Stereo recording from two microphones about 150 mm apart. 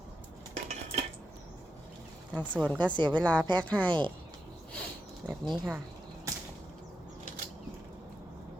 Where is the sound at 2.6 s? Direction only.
10° left (ahead or behind).